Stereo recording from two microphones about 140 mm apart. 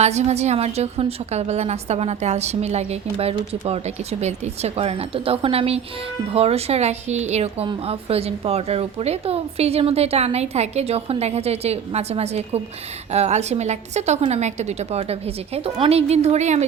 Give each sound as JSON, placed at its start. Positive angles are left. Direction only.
{"t": 0.0, "sound": "a woman's voice", "side_deg": -50}